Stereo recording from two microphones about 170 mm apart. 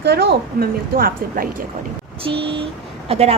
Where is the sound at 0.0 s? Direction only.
75° right (ahead or behind).